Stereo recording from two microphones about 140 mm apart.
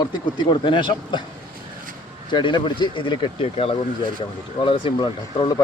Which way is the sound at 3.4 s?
45° left (ahead or behind).